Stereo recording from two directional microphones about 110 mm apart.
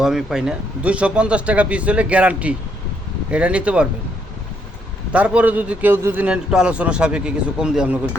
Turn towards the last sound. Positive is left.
turn(degrees=-10)  # may be behind; listen again after turning